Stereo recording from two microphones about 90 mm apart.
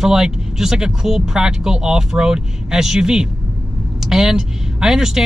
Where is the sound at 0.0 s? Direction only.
5° right (ahead or behind).